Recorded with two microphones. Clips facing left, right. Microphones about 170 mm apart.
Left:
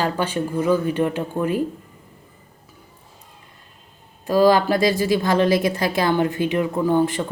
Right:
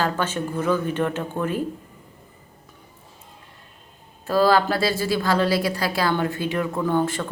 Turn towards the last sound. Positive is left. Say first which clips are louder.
# left 3 dB
turn(degrees=15)  # may be behind; listen again after turning